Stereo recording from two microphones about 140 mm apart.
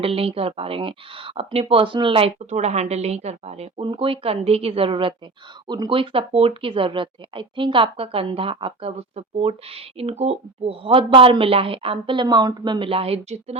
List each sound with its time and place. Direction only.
0.0 s a woman's voice: 45° right (ahead or behind)